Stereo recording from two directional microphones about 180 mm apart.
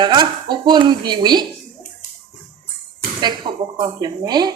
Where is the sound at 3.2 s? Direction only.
25° right (ahead or behind).